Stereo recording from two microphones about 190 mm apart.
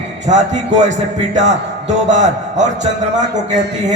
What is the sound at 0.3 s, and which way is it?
A man's voice, 40° right (ahead or behind).